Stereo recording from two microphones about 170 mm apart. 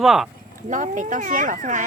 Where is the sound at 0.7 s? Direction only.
50° right (ahead or behind).